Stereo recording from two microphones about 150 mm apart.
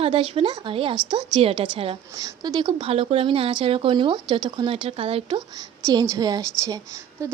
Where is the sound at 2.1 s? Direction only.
25° right (ahead or behind); by 5.4 s 40° right (ahead or behind).